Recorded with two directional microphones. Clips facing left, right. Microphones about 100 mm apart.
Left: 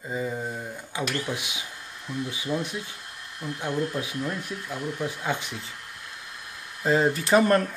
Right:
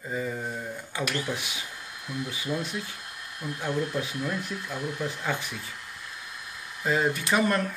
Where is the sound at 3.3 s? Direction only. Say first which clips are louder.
Left 1 dB; 5° right (ahead or behind).